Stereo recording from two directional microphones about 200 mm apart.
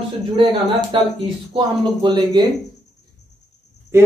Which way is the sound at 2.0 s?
20° right (ahead or behind).